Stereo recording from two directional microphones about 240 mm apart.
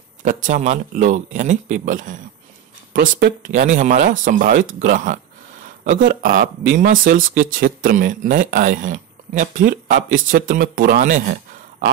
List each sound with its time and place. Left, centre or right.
0.2 s speech: right